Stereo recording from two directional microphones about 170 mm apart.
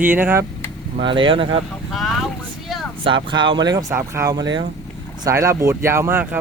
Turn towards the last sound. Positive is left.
turn(degrees=-10)  # may be behind; listen again after turning